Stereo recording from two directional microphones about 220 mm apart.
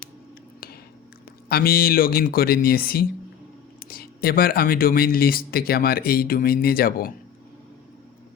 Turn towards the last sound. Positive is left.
turn(degrees=40)  # may be behind; listen again after turning